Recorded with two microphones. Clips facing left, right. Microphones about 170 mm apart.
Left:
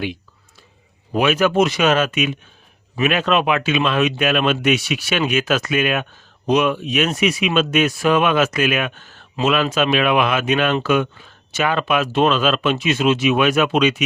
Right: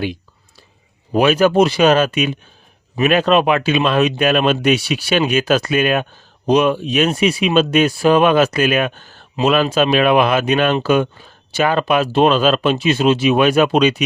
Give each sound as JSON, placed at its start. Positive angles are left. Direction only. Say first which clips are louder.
{"t": 1.1, "sound": "speech", "louder": "right 4 dB", "side_deg": -35}